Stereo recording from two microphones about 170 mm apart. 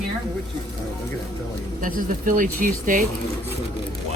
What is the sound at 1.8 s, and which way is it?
Speech, 50° right (ahead or behind).